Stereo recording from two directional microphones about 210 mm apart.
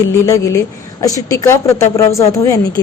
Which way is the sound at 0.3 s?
15° left (ahead or behind).